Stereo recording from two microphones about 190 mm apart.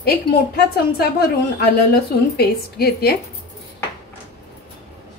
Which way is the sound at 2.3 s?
55° left (ahead or behind).